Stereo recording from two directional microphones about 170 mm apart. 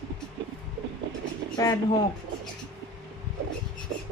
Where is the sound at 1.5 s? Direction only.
20° left (ahead or behind).